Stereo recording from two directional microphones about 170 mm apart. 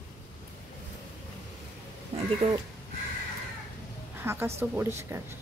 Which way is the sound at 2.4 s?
40° right (ahead or behind).